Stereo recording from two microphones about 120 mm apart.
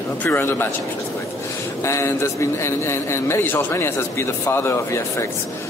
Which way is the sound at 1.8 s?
25° left (ahead or behind).